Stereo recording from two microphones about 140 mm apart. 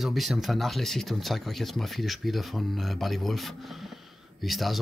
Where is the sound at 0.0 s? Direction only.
Centre (ahead or behind).